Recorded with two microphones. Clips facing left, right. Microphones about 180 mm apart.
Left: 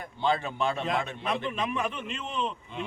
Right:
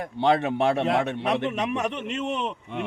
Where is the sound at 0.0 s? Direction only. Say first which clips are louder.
Right 6 dB; 75° right (ahead or behind).